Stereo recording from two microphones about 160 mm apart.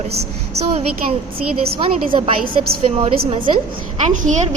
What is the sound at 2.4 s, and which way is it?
Speech, 70° right (ahead or behind).